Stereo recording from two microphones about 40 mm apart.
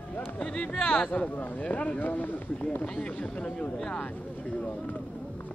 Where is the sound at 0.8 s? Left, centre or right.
Left.